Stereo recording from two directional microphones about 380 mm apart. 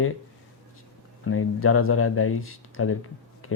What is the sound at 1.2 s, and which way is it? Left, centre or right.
Speech, left.